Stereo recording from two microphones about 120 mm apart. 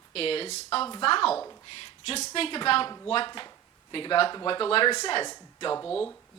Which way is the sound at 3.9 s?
45° left (ahead or behind).